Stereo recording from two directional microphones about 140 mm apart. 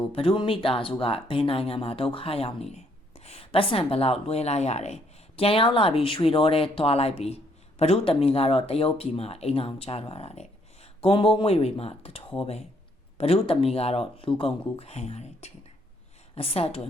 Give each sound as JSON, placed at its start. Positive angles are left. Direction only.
{"t": 0.1, "sound": "speech", "side_deg": 40}
{"t": 5.4, "sound": "speech", "side_deg": 40}